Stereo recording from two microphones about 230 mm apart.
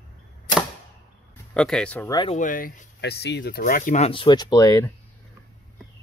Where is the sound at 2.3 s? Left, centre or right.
Left; by 4.9 s centre.